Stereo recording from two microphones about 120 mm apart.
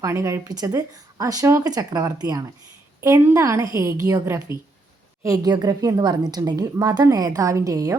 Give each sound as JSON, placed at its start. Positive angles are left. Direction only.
{"t": 0.0, "sound": "speech", "side_deg": -25}
{"t": 3.0, "sound": "a woman's voice", "side_deg": -20}